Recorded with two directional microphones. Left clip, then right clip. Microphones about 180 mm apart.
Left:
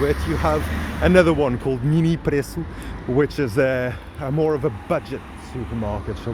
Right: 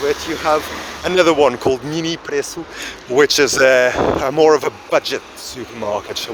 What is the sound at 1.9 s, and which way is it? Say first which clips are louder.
Speech: right 2 dB; 10° right (ahead or behind).